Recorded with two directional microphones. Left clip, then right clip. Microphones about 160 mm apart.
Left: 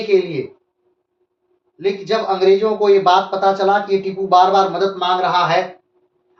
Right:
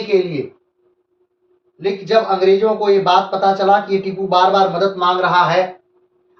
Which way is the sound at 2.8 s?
30° left (ahead or behind).